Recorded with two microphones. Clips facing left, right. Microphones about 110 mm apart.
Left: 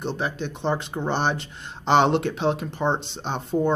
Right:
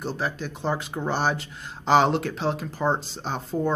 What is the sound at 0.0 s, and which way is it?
Speech, 5° right (ahead or behind).